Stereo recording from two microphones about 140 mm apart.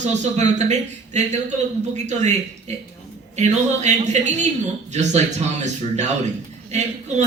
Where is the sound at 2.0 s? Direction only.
55° right (ahead or behind).